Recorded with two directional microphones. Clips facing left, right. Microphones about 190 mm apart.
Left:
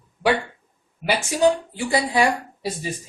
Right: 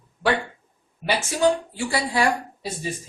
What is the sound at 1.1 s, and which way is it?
A man's voice, 15° left (ahead or behind).